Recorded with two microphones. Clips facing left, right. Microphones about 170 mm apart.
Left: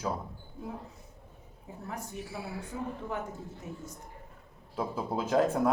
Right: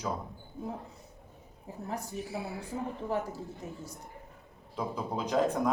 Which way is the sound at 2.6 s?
35° right (ahead or behind).